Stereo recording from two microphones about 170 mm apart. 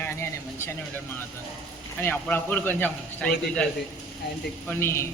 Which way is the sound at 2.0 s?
10° left (ahead or behind).